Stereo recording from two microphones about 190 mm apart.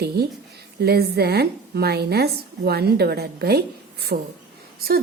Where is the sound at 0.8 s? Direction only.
55° right (ahead or behind).